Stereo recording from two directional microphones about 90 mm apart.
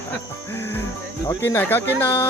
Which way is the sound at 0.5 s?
25° left (ahead or behind).